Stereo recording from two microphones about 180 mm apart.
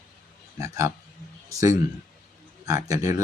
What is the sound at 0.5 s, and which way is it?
Speech, 15° right (ahead or behind).